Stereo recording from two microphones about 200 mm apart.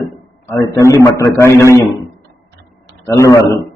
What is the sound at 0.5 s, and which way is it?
A man's voice, 15° left (ahead or behind).